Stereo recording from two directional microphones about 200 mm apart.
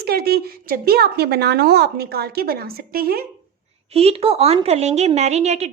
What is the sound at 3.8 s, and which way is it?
A woman's voice, 30° right (ahead or behind).